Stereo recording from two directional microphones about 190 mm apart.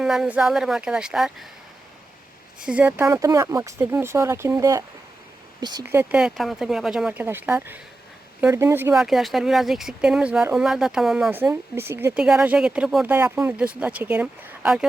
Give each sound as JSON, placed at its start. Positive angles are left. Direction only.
{"t": 0.0, "sound": "speech", "side_deg": 0}
{"t": 2.6, "sound": "speech", "side_deg": -5}
{"t": 9.0, "sound": "speech", "side_deg": 0}